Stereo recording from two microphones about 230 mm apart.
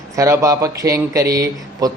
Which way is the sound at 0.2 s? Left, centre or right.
Centre.